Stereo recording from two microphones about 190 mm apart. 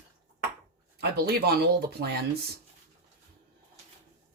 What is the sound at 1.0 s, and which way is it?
Speech, 55° right (ahead or behind).